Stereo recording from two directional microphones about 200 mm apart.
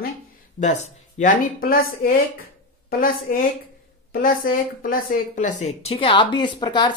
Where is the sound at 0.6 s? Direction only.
35° left (ahead or behind).